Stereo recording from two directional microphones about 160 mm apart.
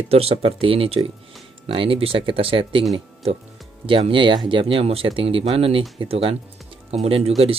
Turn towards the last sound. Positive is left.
turn(degrees=-40)  # may be behind; listen again after turning